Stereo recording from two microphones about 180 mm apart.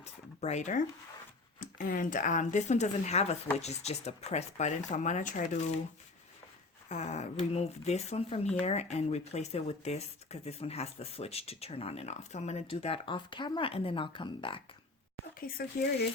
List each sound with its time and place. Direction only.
0.0 s speech: 40° left (ahead or behind)
6.8 s speech: 40° left (ahead or behind)
15.4 s speech: 55° left (ahead or behind)